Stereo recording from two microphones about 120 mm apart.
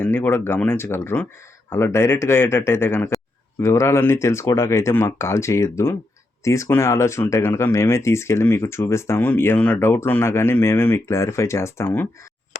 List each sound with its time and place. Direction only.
0.0 s speech: 15° left (ahead or behind)